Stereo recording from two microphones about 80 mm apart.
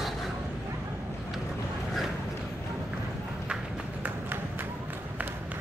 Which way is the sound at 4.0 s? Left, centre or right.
Right.